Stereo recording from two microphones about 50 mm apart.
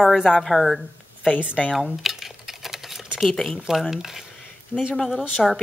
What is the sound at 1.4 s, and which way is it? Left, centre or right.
Speech, right.